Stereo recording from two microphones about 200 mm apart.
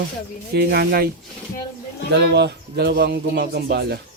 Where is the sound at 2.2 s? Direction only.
55° right (ahead or behind).